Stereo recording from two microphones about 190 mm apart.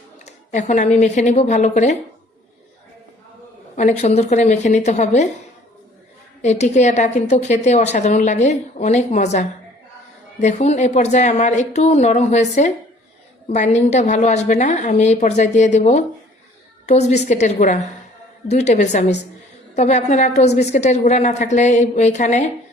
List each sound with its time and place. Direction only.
0.3 s a woman's voice: 40° left (ahead or behind)
3.8 s a woman's voice: 35° left (ahead or behind)
6.4 s a woman's voice: 35° left (ahead or behind)